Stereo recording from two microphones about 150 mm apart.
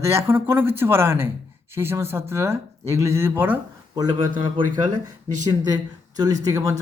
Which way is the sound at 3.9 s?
25° right (ahead or behind).